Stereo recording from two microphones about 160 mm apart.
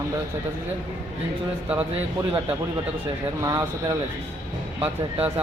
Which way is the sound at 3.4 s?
20° right (ahead or behind).